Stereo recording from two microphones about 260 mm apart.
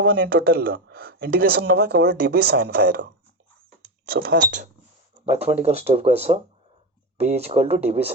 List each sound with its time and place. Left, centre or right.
0.0 s speech: right